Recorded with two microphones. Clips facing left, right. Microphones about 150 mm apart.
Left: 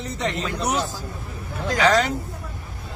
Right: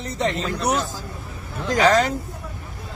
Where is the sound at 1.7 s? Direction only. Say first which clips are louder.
Right 2 dB; 40° right (ahead or behind).